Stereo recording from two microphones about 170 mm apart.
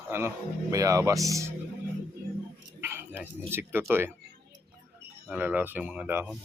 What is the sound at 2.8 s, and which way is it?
Speech, 15° right (ahead or behind).